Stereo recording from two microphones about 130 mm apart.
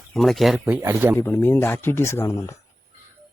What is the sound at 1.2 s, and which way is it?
Speech, 15° left (ahead or behind).